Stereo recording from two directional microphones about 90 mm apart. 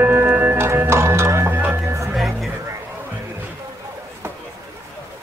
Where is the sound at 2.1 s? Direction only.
Centre (ahead or behind).